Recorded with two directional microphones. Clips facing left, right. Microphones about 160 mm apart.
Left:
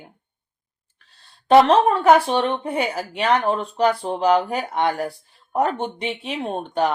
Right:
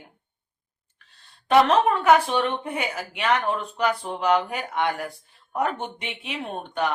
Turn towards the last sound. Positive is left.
turn(degrees=35)  # may be behind; listen again after turning